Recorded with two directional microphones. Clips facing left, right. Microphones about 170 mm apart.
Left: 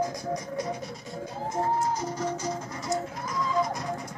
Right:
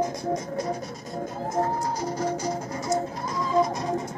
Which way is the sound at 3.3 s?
25° right (ahead or behind).